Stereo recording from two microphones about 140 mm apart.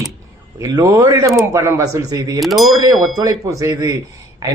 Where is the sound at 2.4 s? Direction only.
Centre (ahead or behind).